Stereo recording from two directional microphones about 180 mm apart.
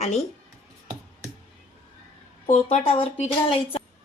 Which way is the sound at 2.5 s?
40° left (ahead or behind).